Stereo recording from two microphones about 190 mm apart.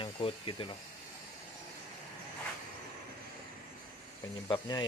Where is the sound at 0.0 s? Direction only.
25° left (ahead or behind).